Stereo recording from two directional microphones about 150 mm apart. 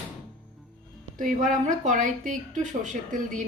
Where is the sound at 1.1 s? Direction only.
60° right (ahead or behind).